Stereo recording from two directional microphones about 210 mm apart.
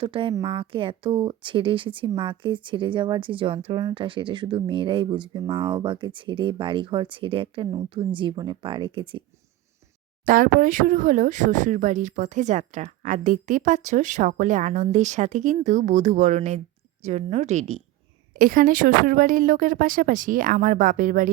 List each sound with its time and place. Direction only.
0.0 s speech: 25° right (ahead or behind)
10.2 s speech: 40° right (ahead or behind)